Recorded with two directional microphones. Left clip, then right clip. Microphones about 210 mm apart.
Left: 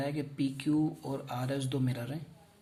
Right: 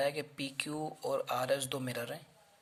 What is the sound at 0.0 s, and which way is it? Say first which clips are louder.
Speech: even; 40° right (ahead or behind).